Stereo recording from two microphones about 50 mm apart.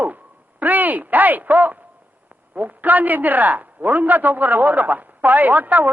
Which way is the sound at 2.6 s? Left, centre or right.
Right.